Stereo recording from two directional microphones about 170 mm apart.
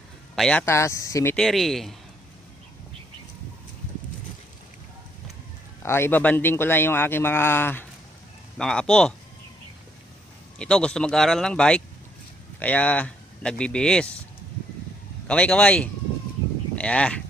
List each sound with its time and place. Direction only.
0.3 s a man's voice: 5° left (ahead or behind)
0.6 s speech: 15° left (ahead or behind)
1.4 s speech: centre (ahead or behind)
5.8 s speech: 15° left (ahead or behind)
10.6 s speech: 5° left (ahead or behind)
15.3 s speech: 5° left (ahead or behind)